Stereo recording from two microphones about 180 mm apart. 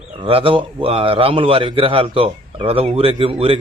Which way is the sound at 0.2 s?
30° right (ahead or behind).